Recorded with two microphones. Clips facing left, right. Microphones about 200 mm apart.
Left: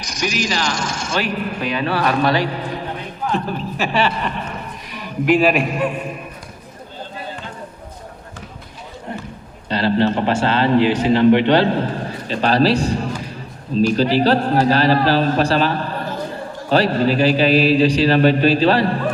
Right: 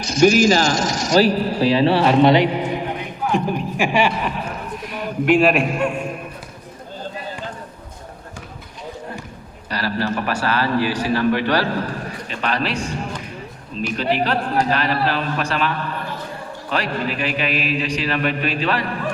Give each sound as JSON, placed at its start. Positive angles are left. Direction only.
{"t": 0.2, "sound": "a man's voice", "side_deg": -50}
{"t": 9.6, "sound": "a man's voice", "side_deg": 25}